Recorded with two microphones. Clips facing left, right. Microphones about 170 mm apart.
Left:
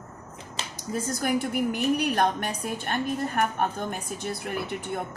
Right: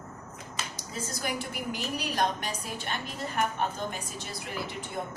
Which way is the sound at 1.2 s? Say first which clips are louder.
Left 9 dB; 55° left (ahead or behind).